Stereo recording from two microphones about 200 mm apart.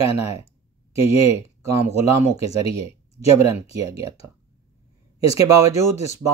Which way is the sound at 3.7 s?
15° right (ahead or behind).